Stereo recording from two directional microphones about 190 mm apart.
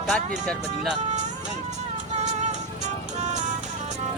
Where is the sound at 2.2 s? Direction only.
35° right (ahead or behind).